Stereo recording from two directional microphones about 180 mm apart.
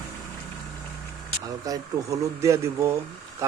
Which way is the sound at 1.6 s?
20° right (ahead or behind).